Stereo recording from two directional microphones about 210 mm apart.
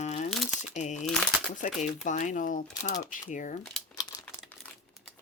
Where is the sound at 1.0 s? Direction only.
5° left (ahead or behind).